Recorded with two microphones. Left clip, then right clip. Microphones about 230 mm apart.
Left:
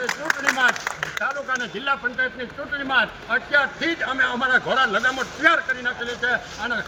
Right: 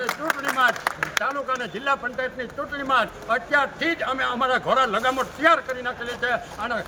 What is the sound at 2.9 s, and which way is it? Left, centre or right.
A man's voice, right.